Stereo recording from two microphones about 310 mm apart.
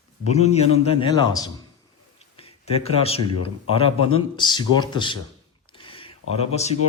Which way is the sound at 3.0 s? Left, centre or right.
Centre.